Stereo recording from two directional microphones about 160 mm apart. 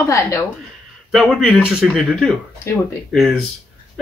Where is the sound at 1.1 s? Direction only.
5° right (ahead or behind).